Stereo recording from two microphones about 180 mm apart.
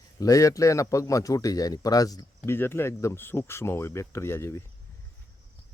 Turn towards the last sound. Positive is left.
turn(degrees=15)  # may be behind; listen again after turning